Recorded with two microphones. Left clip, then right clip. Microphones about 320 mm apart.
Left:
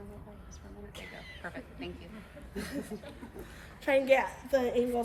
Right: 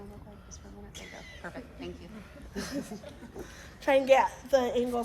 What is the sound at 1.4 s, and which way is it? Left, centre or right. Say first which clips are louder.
A woman's voice: even; centre.